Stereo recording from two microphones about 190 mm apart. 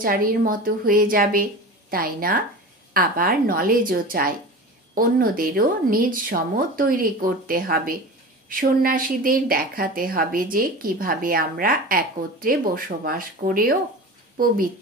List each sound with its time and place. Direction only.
0.0 s a woman's voice: 50° right (ahead or behind)